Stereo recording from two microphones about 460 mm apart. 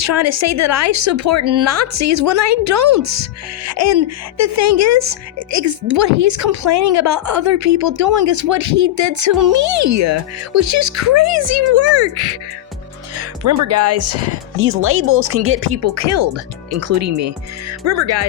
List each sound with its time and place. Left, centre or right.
0.0 s speech: right